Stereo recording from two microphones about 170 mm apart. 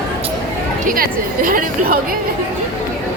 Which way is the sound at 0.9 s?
55° right (ahead or behind).